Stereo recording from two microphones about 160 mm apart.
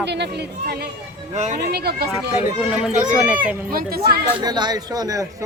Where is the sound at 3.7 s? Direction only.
70° right (ahead or behind).